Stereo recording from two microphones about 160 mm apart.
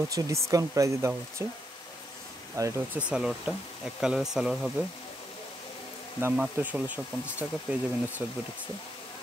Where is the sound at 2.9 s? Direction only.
5° right (ahead or behind).